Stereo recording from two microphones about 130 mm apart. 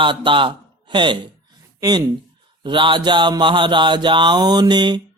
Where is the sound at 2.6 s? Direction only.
40° right (ahead or behind).